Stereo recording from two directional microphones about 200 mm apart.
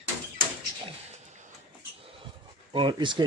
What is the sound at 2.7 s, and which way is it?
Speech, 25° right (ahead or behind).